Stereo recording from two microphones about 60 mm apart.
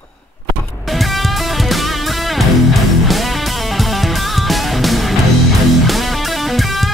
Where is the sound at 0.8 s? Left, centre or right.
Centre.